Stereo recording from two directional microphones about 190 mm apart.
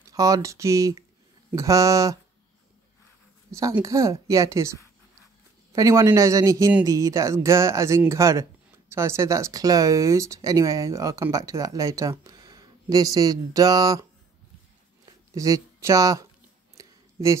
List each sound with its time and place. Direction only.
0.1 s speech: 15° right (ahead or behind)
3.5 s speech: 15° right (ahead or behind)
15.0 s speech: 15° right (ahead or behind)
16.7 s a sound: 15° right (ahead or behind)